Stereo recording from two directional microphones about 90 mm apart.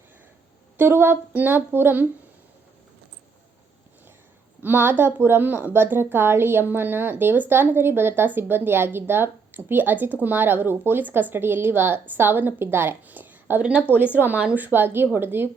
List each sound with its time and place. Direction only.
0.8 s a woman's voice: 25° right (ahead or behind)
4.6 s a woman's voice: 20° right (ahead or behind)